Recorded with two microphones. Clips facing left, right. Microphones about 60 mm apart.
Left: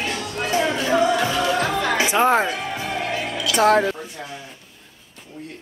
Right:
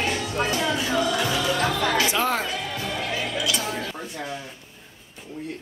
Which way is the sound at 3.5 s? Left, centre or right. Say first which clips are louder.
Left 12 dB; left.